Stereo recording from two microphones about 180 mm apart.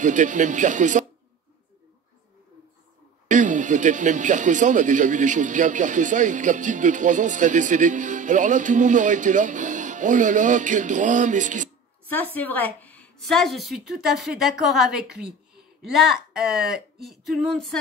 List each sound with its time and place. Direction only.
0.0 s speech: 45° right (ahead or behind)
3.3 s speech: 45° right (ahead or behind)
12.4 s a woman's voice: 10° left (ahead or behind)